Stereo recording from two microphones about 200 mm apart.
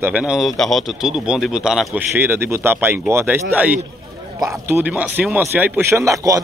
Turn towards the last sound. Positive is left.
turn(degrees=-15)  # may be behind; listen again after turning